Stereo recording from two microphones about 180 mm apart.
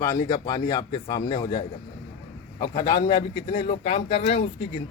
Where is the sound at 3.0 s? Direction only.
25° left (ahead or behind).